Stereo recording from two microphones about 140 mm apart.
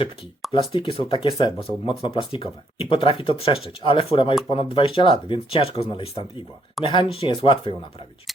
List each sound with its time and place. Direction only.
0.5 s speech: 35° left (ahead or behind)